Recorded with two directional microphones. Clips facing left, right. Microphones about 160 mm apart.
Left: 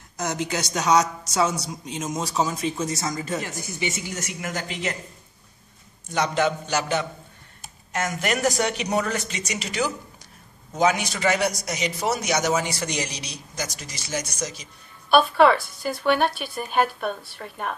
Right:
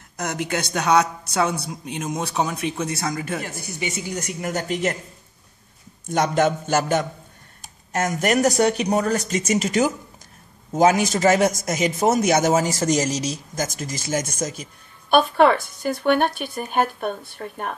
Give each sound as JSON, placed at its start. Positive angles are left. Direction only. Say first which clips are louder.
{"t": 0.2, "sound": "speech", "louder": "right 1 dB", "side_deg": -55}
{"t": 4.1, "sound": "a man's voice", "louder": "right 4 dB", "side_deg": -40}
{"t": 6.0, "sound": "a man's voice", "louder": "right 3 dB", "side_deg": -50}